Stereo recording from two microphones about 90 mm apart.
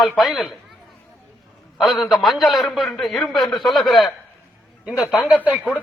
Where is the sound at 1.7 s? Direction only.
Centre (ahead or behind).